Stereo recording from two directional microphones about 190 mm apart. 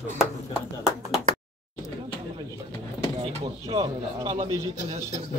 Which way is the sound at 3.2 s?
30° right (ahead or behind).